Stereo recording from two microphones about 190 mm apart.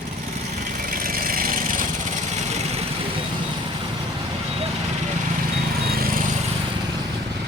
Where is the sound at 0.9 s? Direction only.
50° right (ahead or behind).